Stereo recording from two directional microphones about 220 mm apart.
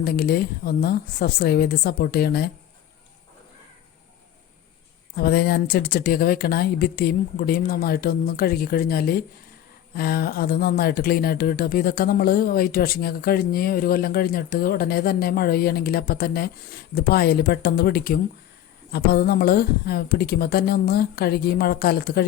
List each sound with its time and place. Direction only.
0.0 s speech: 45° left (ahead or behind)
5.1 s speech: 45° left (ahead or behind)